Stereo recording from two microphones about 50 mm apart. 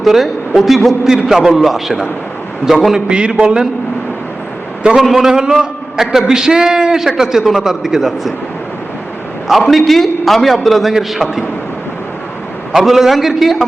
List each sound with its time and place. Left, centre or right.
0.0 s a man's voice: centre
3.1 s a man's voice: right
4.9 s a man's voice: centre
9.6 s a man's voice: centre
12.7 s a man's voice: centre